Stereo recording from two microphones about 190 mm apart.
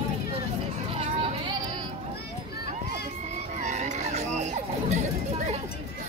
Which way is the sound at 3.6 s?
35° right (ahead or behind).